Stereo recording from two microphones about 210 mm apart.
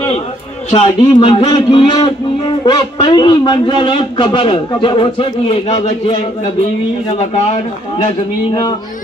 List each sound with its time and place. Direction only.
0.7 s a man's voice: 25° left (ahead or behind)
7.2 s a man's voice: 30° left (ahead or behind)